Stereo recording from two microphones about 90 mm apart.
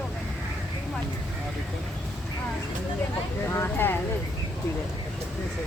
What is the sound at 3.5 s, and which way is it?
Speech, 25° left (ahead or behind).